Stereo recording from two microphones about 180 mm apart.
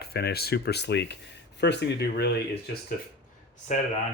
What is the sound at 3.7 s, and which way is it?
Speech, 40° left (ahead or behind).